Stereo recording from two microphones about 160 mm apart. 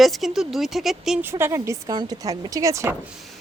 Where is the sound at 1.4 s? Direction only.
15° right (ahead or behind).